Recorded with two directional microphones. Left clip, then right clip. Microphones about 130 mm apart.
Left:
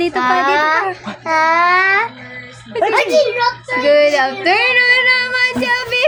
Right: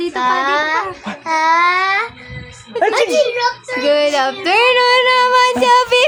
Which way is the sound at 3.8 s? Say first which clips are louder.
Left 2 dB; 20° right (ahead or behind).